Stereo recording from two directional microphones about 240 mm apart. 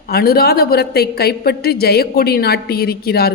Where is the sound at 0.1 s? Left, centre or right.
Left.